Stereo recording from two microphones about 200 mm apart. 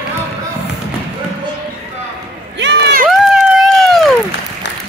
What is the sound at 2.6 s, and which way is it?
Run, 60° right (ahead or behind).